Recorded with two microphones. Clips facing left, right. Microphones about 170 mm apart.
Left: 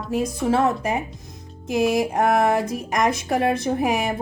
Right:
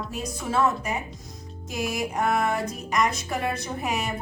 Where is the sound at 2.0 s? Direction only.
55° left (ahead or behind).